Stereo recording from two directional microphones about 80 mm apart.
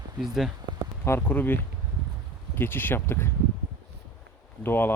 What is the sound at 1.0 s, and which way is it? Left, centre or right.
Speech, left.